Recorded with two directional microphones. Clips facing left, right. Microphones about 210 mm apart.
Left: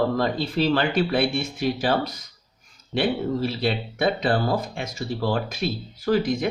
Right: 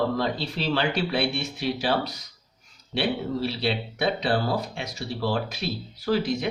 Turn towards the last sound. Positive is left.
turn(degrees=50)  # may be behind; listen again after turning